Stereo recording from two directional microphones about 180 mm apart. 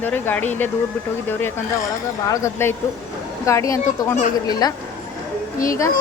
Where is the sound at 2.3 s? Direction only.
15° left (ahead or behind).